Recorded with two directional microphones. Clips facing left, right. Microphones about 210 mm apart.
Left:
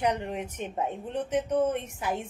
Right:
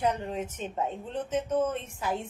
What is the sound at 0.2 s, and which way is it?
A woman's voice, 15° left (ahead or behind).